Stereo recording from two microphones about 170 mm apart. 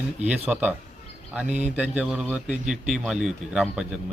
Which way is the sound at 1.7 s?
10° right (ahead or behind).